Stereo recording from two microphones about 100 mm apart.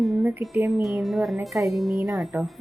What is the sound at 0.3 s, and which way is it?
Speech, 20° right (ahead or behind).